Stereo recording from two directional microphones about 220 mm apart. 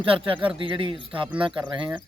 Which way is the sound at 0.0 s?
25° right (ahead or behind).